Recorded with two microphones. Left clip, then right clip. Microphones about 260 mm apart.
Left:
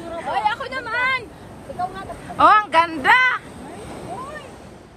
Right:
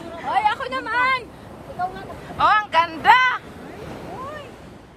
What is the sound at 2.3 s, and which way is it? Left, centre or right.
Speech, centre.